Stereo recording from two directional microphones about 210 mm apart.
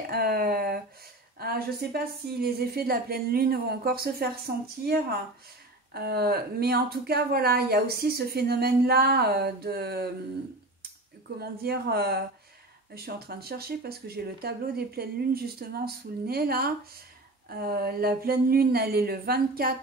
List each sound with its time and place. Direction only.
0.1 s speech: 45° right (ahead or behind)
5.9 s speech: 50° right (ahead or behind)
11.3 s speech: 45° right (ahead or behind)